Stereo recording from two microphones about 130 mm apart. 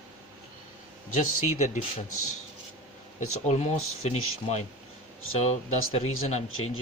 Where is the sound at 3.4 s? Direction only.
60° left (ahead or behind).